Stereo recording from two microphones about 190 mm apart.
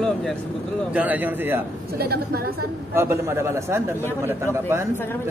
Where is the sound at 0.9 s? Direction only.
10° right (ahead or behind).